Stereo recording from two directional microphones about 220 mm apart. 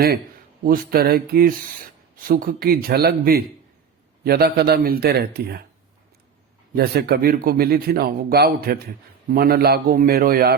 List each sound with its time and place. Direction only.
0.6 s a man's voice: 40° right (ahead or behind)
6.7 s a man's voice: 45° right (ahead or behind)